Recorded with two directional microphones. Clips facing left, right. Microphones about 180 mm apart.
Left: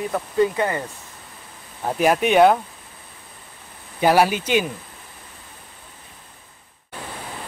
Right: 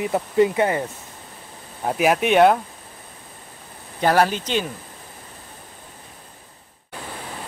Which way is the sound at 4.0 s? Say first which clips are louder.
Left 1 dB; 10° left (ahead or behind).